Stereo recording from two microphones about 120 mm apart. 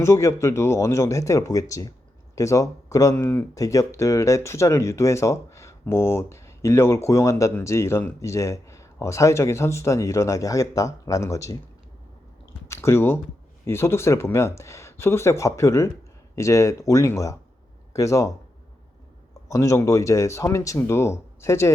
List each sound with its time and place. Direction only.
0.0 s speech: 25° left (ahead or behind)
12.6 s speech: 20° left (ahead or behind)
19.5 s speech: 25° left (ahead or behind)